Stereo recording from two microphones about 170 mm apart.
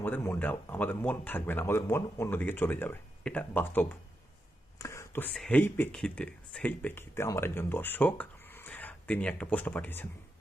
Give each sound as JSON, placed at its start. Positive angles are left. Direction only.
{"t": 0.0, "sound": "speech", "side_deg": 10}
{"t": 4.8, "sound": "whispering", "side_deg": 15}
{"t": 5.3, "sound": "speech", "side_deg": 5}